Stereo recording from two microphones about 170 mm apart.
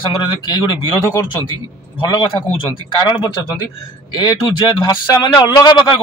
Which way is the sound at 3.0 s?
25° left (ahead or behind).